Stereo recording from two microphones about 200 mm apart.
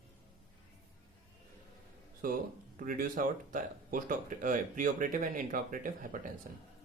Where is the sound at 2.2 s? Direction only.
45° right (ahead or behind).